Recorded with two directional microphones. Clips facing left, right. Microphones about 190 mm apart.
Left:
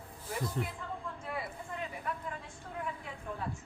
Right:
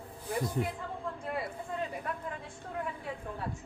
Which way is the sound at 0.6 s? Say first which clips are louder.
Right 4 dB; 15° right (ahead or behind).